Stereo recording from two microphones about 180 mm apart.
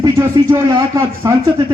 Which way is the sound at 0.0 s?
20° right (ahead or behind).